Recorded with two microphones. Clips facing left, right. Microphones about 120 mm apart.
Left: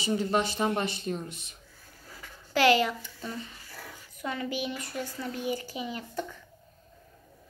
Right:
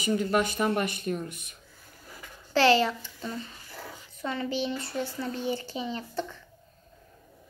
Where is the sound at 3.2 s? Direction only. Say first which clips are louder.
Right 3 dB; 25° right (ahead or behind).